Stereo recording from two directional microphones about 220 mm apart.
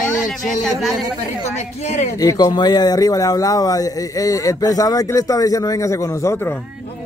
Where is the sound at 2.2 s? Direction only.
15° left (ahead or behind).